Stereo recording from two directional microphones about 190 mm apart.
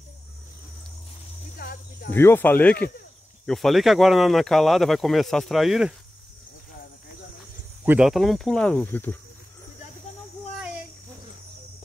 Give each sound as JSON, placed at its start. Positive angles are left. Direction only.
{"t": 1.6, "sound": "speech", "side_deg": 55}
{"t": 2.1, "sound": "speech", "side_deg": 10}
{"t": 7.8, "sound": "speech", "side_deg": -5}